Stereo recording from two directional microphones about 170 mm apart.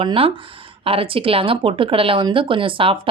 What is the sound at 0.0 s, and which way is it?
Speech, 30° right (ahead or behind).